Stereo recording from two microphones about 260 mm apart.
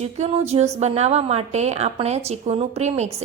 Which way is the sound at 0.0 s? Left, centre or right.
Right.